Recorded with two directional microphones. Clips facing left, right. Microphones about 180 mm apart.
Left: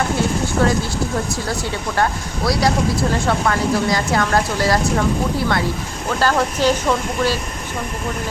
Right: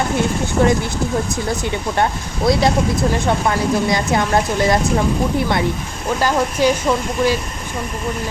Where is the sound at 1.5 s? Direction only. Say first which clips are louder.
Right 2 dB; 20° right (ahead or behind).